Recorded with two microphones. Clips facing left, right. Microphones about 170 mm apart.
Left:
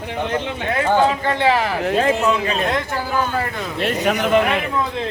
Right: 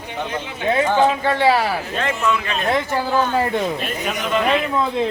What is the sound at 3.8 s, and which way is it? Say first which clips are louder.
Speech: left 6 dB; 70° left (ahead or behind).